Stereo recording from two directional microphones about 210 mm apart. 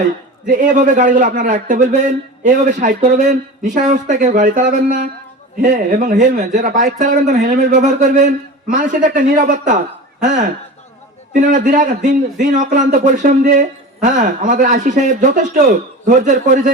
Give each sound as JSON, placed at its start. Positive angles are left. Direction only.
{"t": 0.4, "sound": "a man's voice", "side_deg": -35}